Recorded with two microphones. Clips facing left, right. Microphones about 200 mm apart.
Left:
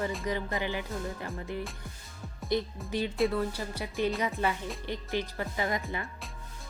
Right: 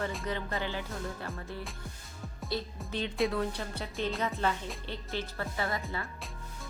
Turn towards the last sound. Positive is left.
turn(degrees=15)  # may be behind; listen again after turning